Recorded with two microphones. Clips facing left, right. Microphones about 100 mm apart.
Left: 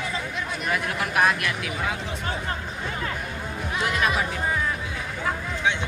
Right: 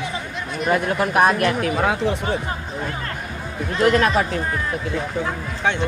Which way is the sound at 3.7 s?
55° right (ahead or behind).